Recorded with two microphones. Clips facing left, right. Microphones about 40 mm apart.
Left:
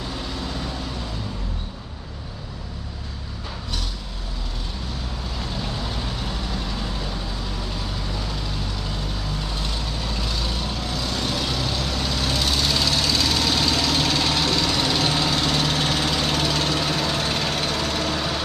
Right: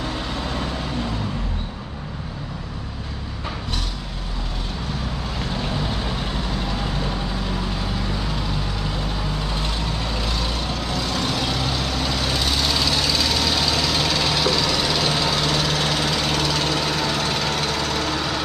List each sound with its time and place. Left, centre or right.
0.4 s vehicle: right
5.6 s vehicle: right
7.8 s vehicle: centre
9.5 s vehicle: right
15.7 s engine: centre
16.7 s vehicle: centre